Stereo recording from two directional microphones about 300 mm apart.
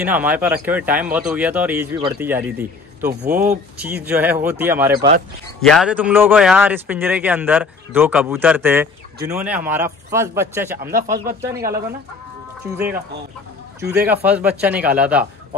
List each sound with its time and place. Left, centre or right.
0.0 s a man's voice: centre
3.1 s speech: right
3.8 s a man's voice: centre
10.8 s speech: right
11.1 s speech: centre
12.7 s a man's voice: centre